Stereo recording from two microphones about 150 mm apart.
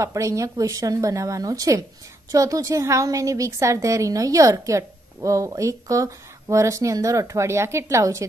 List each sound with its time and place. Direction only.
0.0 s a woman's voice: 20° right (ahead or behind)